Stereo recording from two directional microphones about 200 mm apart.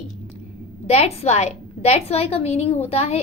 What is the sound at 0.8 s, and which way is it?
A woman's voice, 30° left (ahead or behind).